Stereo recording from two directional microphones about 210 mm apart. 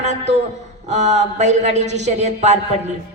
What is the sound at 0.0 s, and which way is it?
A man's voice, 35° right (ahead or behind).